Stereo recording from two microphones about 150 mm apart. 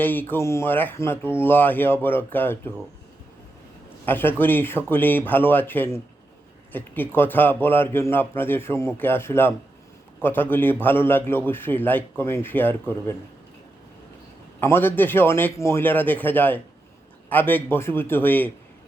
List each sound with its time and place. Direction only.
0.0 s a man's voice: 15° left (ahead or behind)
4.0 s a man's voice: 15° left (ahead or behind)
14.6 s a man's voice: 15° left (ahead or behind)